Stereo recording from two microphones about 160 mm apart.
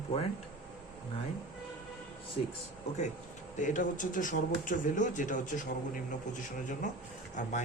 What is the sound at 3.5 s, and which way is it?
Speech, 55° left (ahead or behind).